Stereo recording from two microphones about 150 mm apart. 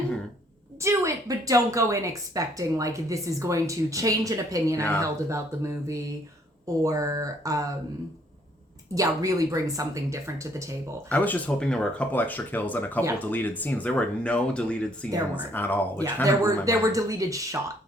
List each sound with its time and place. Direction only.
0.8 s a woman's voice: 20° right (ahead or behind)
9.0 s a woman's voice: 25° right (ahead or behind)
11.1 s speech: 10° left (ahead or behind)
16.2 s a woman's voice: 20° right (ahead or behind)